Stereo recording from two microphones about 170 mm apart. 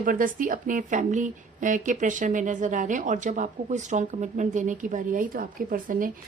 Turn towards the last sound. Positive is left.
turn(degrees=-55)  # may be behind; listen again after turning